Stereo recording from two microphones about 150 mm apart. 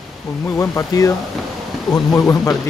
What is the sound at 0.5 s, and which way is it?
Speech, 20° left (ahead or behind).